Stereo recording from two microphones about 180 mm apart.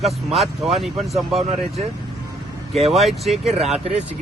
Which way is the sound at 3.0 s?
Centre (ahead or behind).